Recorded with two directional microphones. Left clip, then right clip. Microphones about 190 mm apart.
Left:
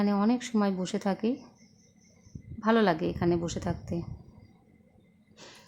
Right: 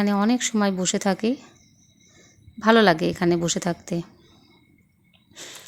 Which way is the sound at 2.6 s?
20° right (ahead or behind).